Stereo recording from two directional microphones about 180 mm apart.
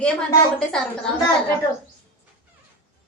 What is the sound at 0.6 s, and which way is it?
Speech, 5° left (ahead or behind).